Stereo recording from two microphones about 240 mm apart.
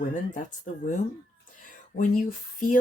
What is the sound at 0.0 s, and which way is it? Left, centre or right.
Speech, left.